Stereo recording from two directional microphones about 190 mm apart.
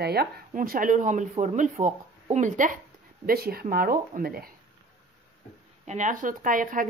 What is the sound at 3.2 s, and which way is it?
Speech, 55° right (ahead or behind).